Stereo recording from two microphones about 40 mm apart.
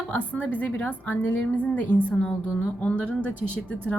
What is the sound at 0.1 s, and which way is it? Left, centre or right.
A woman's voice, left.